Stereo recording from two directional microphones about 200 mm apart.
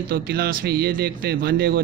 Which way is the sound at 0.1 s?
50° right (ahead or behind).